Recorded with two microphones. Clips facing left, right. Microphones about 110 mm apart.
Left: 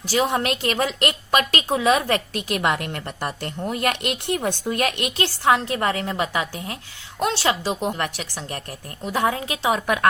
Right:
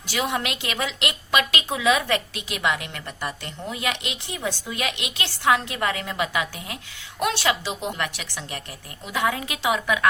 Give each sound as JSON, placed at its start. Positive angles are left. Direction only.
{"t": 0.1, "sound": "a woman's voice", "side_deg": 35}